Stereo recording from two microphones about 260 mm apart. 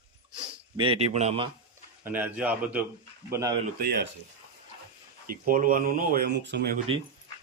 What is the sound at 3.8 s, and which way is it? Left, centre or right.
Speech, right.